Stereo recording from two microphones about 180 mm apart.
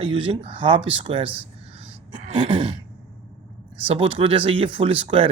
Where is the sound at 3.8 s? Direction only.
30° right (ahead or behind).